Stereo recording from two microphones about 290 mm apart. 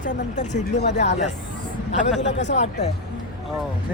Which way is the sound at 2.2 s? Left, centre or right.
Left.